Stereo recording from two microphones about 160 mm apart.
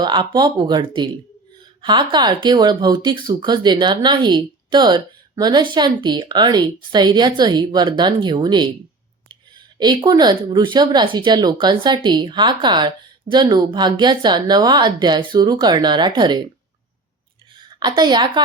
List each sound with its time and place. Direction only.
0.0 s speech: 25° right (ahead or behind)
9.7 s speech: 25° right (ahead or behind)
17.6 s a woman's voice: 30° right (ahead or behind)